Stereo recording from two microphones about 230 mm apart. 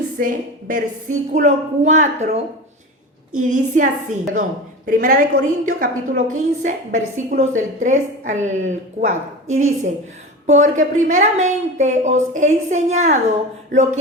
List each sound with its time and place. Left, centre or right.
0.2 s a woman's voice: right
3.4 s a woman's voice: right
9.5 s a woman's voice: right
10.4 s a woman's voice: right